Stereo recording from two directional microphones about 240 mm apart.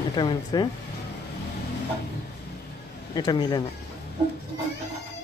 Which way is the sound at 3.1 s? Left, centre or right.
Centre.